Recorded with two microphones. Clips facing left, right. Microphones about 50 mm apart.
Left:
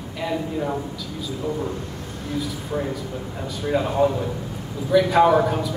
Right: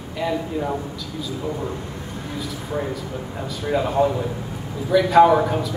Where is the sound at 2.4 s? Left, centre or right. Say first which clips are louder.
Left 1 dB; centre.